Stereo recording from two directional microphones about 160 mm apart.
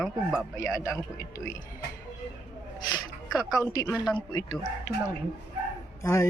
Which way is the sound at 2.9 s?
20° left (ahead or behind).